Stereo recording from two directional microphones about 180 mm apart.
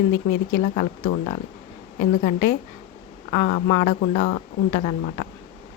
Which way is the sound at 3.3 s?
40° left (ahead or behind).